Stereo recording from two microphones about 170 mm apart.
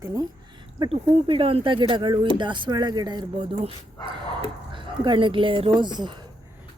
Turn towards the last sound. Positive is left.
turn(degrees=-25)  # may be behind; listen again after turning